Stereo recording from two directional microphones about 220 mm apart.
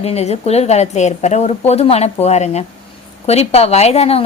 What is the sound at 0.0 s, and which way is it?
A woman's voice, 30° left (ahead or behind).